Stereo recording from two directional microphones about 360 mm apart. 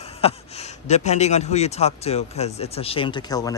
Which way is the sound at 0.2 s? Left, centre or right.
Centre.